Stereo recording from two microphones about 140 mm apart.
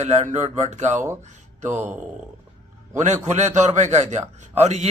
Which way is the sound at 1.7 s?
15° right (ahead or behind).